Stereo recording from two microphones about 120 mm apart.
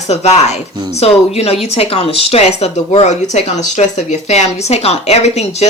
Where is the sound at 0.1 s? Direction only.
65° left (ahead or behind).